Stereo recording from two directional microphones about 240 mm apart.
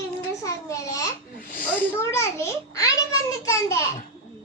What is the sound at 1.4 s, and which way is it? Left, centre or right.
Snake, left.